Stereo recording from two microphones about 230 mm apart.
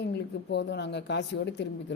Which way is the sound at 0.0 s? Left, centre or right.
Left.